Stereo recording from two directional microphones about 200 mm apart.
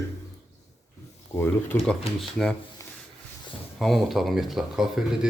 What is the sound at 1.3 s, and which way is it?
Speech, 10° left (ahead or behind).